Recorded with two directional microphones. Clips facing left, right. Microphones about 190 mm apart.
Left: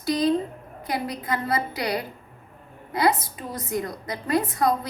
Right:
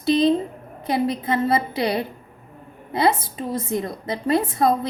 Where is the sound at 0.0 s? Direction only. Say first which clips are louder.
Right 4 dB; 25° right (ahead or behind).